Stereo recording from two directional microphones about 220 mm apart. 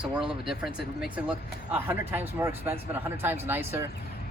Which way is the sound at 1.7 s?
10° right (ahead or behind).